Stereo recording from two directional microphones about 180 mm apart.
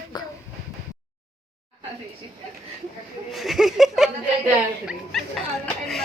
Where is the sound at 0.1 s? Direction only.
25° left (ahead or behind).